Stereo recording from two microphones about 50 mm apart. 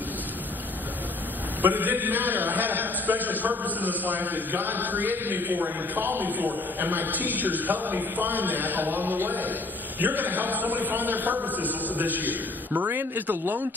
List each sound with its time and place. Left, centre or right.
1.6 s a man's voice: right